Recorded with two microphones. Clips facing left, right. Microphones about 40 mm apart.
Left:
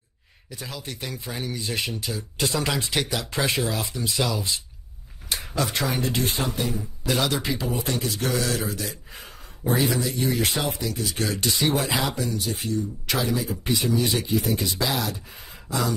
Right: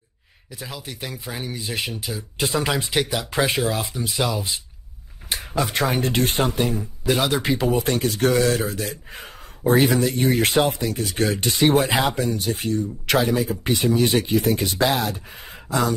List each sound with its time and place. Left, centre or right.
0.5 s speech: centre
5.7 s speech: right
11.2 s speech: right